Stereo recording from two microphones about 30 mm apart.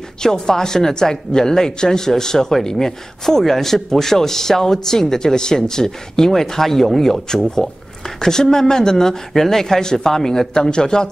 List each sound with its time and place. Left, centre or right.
0.2 s a man's voice: left